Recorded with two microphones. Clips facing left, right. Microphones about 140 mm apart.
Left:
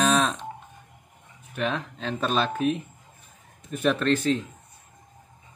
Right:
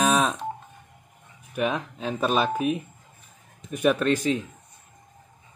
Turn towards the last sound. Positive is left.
turn(degrees=-5)  # may be behind; listen again after turning